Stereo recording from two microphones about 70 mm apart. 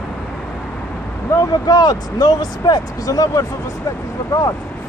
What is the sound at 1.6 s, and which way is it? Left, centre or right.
Speech, left.